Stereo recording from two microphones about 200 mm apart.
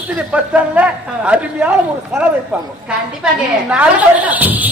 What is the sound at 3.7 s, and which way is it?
A man's voice, 5° right (ahead or behind).